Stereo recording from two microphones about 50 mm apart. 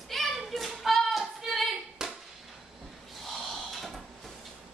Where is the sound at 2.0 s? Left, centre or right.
Centre.